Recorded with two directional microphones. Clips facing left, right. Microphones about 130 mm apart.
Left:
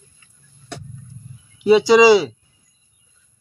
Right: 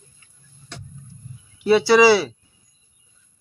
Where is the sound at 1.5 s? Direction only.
15° left (ahead or behind).